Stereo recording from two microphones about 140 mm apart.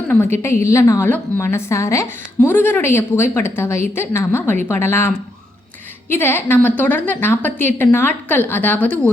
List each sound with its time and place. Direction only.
0.1 s a woman's voice: 15° left (ahead or behind)